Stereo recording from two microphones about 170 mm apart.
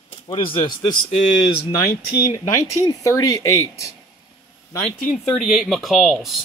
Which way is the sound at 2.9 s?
20° left (ahead or behind).